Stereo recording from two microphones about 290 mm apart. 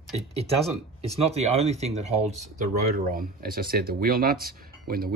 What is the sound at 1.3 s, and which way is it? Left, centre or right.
Speech, right.